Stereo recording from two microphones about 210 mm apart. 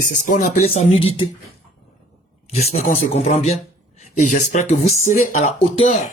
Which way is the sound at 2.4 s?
30° left (ahead or behind).